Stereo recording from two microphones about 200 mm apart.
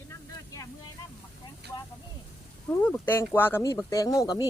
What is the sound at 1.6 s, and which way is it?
Vehicle, 60° right (ahead or behind).